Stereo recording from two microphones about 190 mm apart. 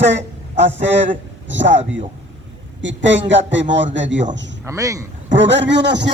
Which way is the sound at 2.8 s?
75° right (ahead or behind).